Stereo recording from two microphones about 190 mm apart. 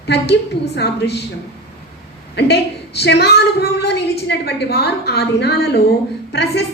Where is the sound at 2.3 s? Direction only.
60° left (ahead or behind).